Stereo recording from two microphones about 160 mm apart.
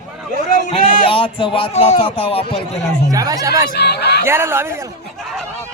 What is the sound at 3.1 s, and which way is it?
Speech, 20° right (ahead or behind).